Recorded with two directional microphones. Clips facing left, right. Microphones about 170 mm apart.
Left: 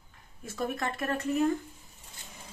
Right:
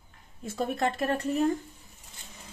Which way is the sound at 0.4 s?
30° right (ahead or behind).